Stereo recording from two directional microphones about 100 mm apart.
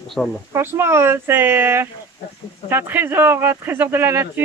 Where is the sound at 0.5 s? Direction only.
25° right (ahead or behind).